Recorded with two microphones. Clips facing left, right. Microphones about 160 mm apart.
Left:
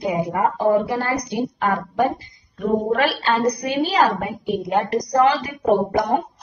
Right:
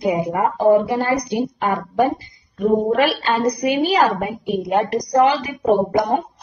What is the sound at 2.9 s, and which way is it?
A woman's voice, 15° right (ahead or behind).